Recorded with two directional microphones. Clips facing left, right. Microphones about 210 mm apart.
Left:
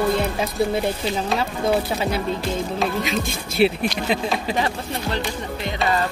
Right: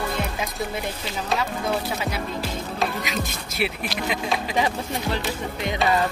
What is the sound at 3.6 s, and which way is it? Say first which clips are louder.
Speech: left 9 dB; 30° left (ahead or behind).